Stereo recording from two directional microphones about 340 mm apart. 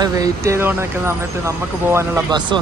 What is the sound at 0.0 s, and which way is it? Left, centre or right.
Speech, centre.